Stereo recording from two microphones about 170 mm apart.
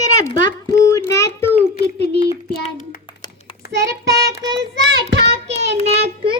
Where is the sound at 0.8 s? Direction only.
20° left (ahead or behind).